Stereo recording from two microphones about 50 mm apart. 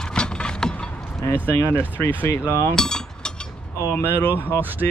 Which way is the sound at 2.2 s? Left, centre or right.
Left.